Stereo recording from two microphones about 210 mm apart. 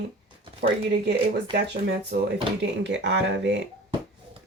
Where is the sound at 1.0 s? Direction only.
55° right (ahead or behind).